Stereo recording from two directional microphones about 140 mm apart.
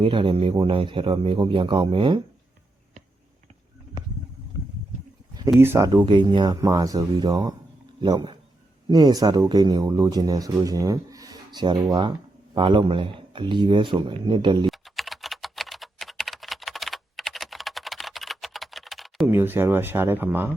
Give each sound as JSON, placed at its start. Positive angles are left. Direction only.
{"t": 0.0, "sound": "a man's voice", "side_deg": -35}
{"t": 5.5, "sound": "speech", "side_deg": -20}
{"t": 6.1, "sound": "a man's voice", "side_deg": -35}
{"t": 14.7, "sound": "typing", "side_deg": 0}
{"t": 19.3, "sound": "speech", "side_deg": -15}